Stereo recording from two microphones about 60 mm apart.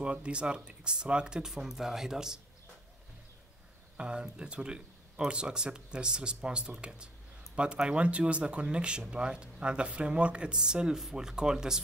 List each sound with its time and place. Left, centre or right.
0.0 s speech: centre
3.9 s speech: centre